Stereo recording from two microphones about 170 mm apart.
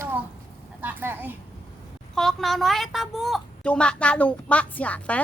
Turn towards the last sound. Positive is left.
turn(degrees=10)  # may be behind; listen again after turning